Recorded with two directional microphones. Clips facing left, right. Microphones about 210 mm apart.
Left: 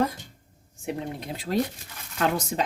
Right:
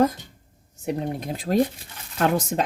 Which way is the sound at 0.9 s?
45° right (ahead or behind).